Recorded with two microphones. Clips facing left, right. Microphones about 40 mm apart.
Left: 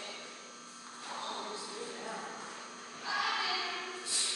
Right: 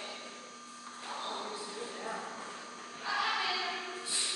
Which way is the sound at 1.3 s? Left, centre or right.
Centre.